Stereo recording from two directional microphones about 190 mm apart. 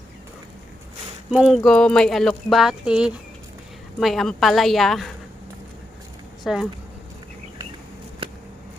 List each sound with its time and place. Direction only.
1.3 s speech: centre (ahead or behind)
6.4 s speech: centre (ahead or behind)
8.2 s a sound: 30° right (ahead or behind)